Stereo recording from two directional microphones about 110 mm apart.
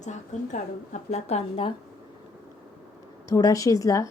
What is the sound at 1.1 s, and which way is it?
Speech, 75° left (ahead or behind).